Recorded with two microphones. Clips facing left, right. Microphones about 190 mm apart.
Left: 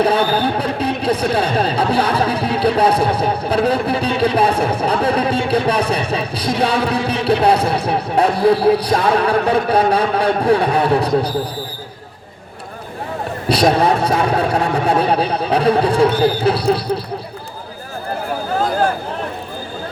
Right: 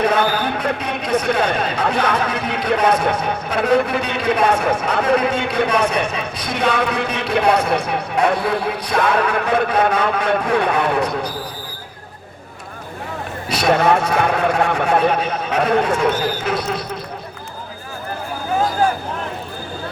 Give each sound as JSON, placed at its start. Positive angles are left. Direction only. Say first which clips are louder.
{"t": 0.0, "sound": "speech", "louder": "left 2 dB", "side_deg": 30}
{"t": 5.0, "sound": "music", "louder": "even", "side_deg": 30}
{"t": 8.4, "sound": "a man's voice", "louder": "left 8 dB", "side_deg": 35}
{"t": 13.5, "sound": "a sound", "louder": "left 8 dB", "side_deg": 35}
{"t": 14.3, "sound": "speech", "louder": "left 1 dB", "side_deg": 35}